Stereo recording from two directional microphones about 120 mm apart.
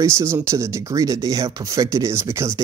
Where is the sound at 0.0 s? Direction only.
20° right (ahead or behind).